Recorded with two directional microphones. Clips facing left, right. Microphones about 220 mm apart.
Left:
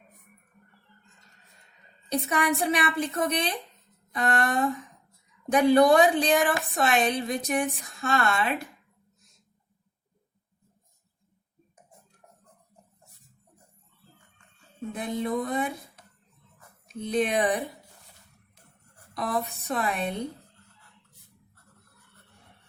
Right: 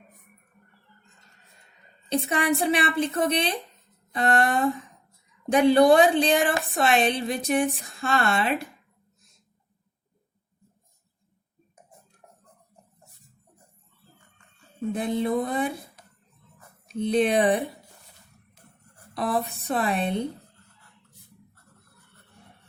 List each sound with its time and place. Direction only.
2.0 s a woman's voice: 30° right (ahead or behind)
14.9 s a woman's voice: 30° right (ahead or behind)
16.9 s a woman's voice: 30° right (ahead or behind)
19.1 s a woman's voice: 30° right (ahead or behind)